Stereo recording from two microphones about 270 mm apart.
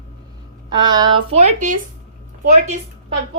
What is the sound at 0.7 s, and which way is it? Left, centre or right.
Speech, centre.